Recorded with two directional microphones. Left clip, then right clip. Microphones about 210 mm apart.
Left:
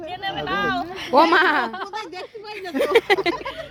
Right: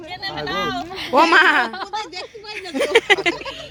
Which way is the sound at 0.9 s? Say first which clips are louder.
Right 2 dB; 40° right (ahead or behind).